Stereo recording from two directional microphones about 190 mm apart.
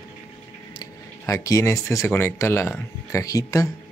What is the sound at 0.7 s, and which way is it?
Speech, 20° left (ahead or behind).